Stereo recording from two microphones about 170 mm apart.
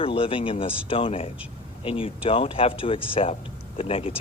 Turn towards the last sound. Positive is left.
turn(degrees=35)  # may be behind; listen again after turning